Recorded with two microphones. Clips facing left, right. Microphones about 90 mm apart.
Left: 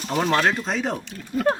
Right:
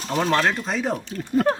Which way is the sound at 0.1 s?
5° left (ahead or behind).